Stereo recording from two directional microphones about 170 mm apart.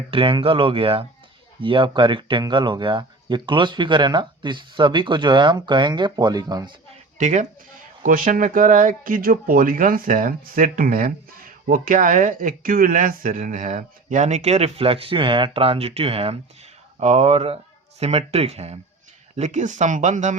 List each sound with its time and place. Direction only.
0.1 s speech: 30° right (ahead or behind)
7.2 s speech: 45° right (ahead or behind)